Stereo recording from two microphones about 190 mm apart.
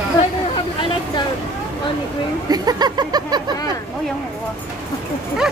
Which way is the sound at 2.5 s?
20° right (ahead or behind).